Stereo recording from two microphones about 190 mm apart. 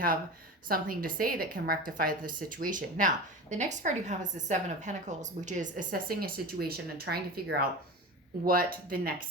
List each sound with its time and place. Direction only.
0.7 s a woman's voice: 50° right (ahead or behind)